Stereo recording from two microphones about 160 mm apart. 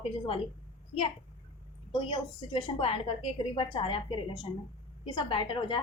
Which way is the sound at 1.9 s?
30° left (ahead or behind).